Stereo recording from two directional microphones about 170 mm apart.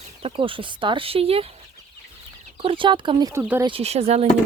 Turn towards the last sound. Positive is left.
turn(degrees=-35)  # may be behind; listen again after turning